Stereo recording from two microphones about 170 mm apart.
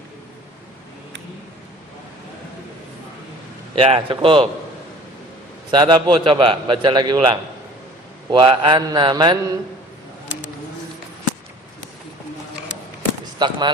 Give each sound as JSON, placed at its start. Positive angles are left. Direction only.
{"t": 3.8, "sound": "speech", "side_deg": -30}
{"t": 5.7, "sound": "a man's voice", "side_deg": -25}
{"t": 13.4, "sound": "a man's voice", "side_deg": -25}